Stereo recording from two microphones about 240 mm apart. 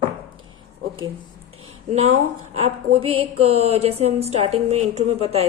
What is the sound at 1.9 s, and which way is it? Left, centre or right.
A woman's voice, right.